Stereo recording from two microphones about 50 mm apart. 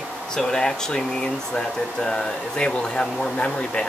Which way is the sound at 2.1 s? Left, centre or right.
Centre.